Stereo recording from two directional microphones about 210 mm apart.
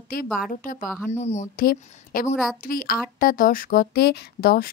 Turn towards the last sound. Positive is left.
turn(degrees=50)  # may be behind; listen again after turning